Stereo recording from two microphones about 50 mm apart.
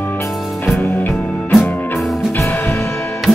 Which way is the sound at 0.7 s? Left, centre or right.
Left.